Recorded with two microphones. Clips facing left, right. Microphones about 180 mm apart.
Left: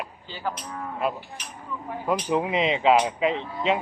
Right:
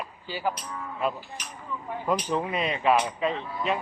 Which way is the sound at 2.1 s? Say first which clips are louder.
Left 6 dB; 20° left (ahead or behind).